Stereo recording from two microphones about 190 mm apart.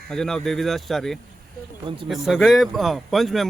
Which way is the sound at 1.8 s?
25° right (ahead or behind).